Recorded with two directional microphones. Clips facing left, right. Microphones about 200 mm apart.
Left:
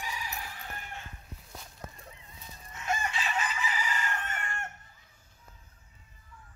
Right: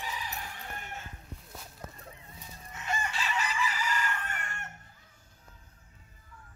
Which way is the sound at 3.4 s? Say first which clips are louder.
Right 2 dB; 45° left (ahead or behind).